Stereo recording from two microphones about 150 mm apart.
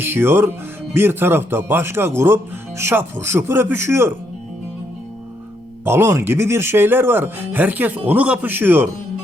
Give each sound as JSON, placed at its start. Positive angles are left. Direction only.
{"t": 0.0, "sound": "speech", "side_deg": -15}
{"t": 5.8, "sound": "speech", "side_deg": -15}